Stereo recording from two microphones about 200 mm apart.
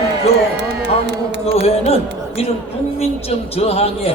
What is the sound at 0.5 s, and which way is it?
Music, 60° right (ahead or behind).